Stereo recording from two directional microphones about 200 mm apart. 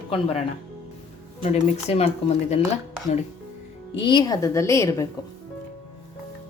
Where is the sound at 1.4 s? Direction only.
35° left (ahead or behind).